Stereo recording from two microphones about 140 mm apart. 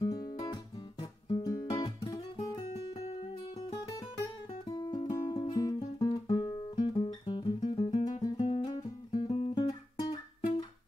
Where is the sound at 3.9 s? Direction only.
25° left (ahead or behind).